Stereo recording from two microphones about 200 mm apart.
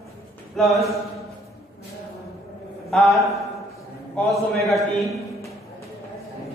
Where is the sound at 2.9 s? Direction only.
Centre (ahead or behind).